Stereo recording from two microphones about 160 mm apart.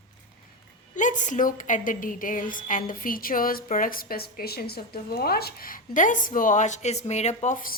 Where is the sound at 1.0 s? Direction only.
50° left (ahead or behind).